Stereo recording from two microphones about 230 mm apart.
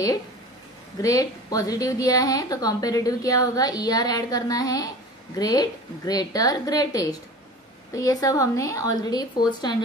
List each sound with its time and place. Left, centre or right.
1.0 s a woman's voice: centre